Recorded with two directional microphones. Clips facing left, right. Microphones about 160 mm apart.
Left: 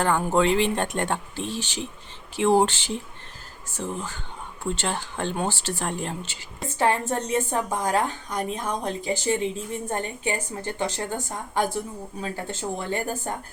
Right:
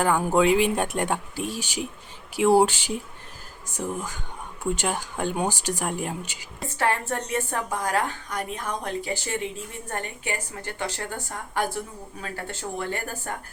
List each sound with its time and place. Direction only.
0.0 s speech: 10° right (ahead or behind)
6.7 s a woman's voice: 20° left (ahead or behind)